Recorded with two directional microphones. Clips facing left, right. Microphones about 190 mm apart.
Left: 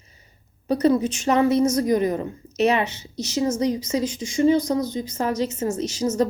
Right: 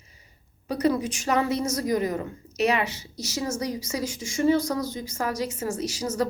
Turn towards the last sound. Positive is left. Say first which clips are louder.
# left 5 dB
turn(degrees=25)  # may be behind; listen again after turning